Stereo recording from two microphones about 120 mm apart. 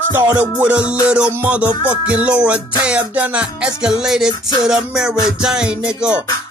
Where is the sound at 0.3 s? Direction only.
10° right (ahead or behind).